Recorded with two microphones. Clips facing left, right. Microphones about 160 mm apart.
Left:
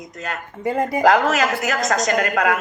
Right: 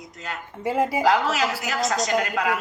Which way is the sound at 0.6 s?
5° right (ahead or behind).